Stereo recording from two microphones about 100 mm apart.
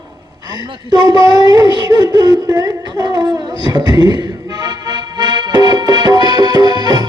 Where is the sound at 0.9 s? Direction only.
45° right (ahead or behind).